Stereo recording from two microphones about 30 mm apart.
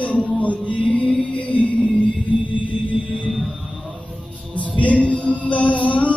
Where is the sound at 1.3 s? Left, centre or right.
Left.